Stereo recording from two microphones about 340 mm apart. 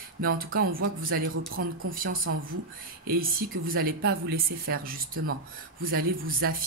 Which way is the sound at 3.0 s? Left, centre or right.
Right.